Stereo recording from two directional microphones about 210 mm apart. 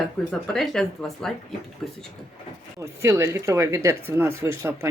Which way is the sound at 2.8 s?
15° right (ahead or behind).